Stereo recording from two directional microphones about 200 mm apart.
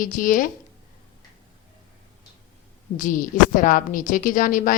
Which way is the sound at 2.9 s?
40° left (ahead or behind).